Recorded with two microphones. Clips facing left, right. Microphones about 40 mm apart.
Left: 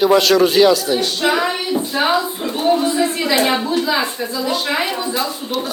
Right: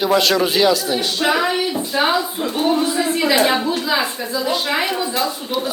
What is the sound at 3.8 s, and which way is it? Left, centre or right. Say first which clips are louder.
Speech: left 1 dB; centre.